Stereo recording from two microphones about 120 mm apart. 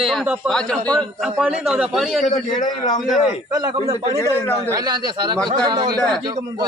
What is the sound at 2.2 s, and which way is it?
Speech, 90° left.